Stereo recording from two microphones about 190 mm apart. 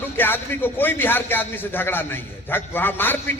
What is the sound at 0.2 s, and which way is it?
A man's voice, 10° left (ahead or behind).